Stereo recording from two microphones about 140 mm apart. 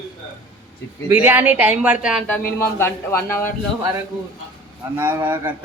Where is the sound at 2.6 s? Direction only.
15° left (ahead or behind).